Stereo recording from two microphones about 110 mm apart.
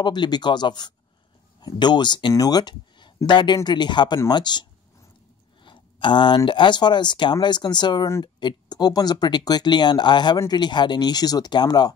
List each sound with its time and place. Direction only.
0.0 s speech: 40° left (ahead or behind)